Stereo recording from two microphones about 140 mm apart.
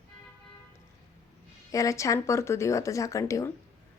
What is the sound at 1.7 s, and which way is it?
Speech, 25° left (ahead or behind).